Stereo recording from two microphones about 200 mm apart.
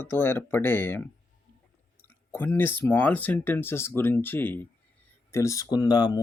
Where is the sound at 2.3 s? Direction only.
10° left (ahead or behind).